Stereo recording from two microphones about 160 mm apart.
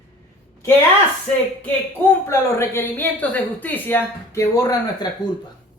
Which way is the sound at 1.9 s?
15° left (ahead or behind).